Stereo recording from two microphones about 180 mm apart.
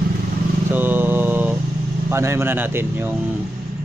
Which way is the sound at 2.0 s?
15° right (ahead or behind).